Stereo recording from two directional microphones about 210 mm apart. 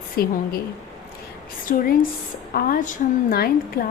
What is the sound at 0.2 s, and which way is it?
Speech, 45° left (ahead or behind).